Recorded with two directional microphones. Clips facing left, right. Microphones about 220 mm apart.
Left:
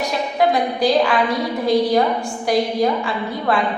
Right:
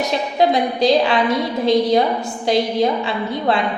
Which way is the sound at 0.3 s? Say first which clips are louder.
Right 1 dB; 25° right (ahead or behind).